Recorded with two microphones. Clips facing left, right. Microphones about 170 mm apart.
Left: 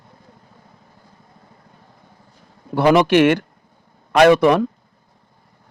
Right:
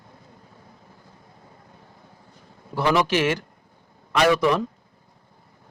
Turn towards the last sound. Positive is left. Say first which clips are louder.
# left 7 dB
turn(degrees=60)  # may be behind; listen again after turning